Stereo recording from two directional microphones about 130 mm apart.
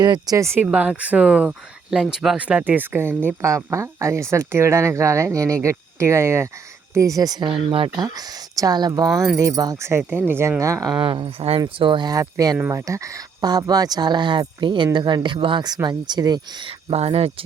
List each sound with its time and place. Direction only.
0.0 s speech: 30° right (ahead or behind)
7.7 s speech: 45° right (ahead or behind)
8.0 s speech: 30° right (ahead or behind)
11.0 s speech: 40° right (ahead or behind)
11.8 s speech: 35° right (ahead or behind)
16.9 s speech: 50° right (ahead or behind)